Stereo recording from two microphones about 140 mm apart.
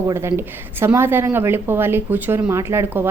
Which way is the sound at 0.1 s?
20° right (ahead or behind).